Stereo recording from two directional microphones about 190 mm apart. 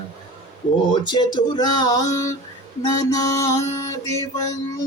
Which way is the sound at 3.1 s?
20° left (ahead or behind).